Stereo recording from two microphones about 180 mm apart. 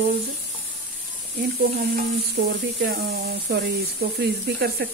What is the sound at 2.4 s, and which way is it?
Speech, 80° right.